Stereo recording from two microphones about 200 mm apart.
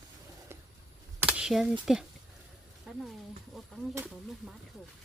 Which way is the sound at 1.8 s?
5° right (ahead or behind).